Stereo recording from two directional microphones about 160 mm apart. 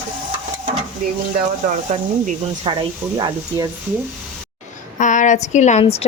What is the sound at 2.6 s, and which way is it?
A woman's voice, 35° right (ahead or behind).